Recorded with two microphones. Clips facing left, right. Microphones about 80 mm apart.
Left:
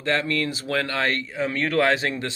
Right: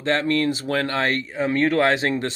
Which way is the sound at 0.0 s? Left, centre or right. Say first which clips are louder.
Right 3 dB; right.